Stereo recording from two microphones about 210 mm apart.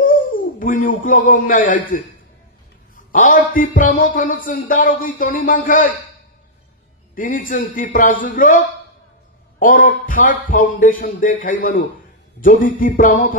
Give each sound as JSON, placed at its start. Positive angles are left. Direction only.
{"t": 0.0, "sound": "speech", "side_deg": 40}
{"t": 3.1, "sound": "speech", "side_deg": 40}
{"t": 7.2, "sound": "speech", "side_deg": 40}